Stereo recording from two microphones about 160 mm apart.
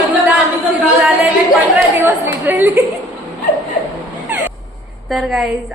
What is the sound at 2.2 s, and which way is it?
Speech, 15° right (ahead or behind).